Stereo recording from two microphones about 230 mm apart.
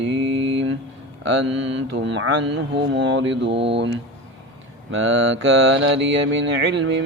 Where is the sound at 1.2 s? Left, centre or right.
Right.